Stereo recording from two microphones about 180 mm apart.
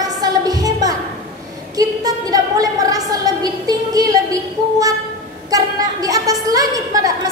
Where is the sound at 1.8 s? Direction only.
20° right (ahead or behind).